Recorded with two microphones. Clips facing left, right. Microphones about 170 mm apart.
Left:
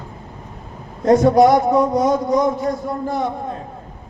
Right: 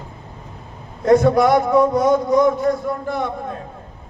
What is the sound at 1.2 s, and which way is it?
A man's voice, 55° right (ahead or behind).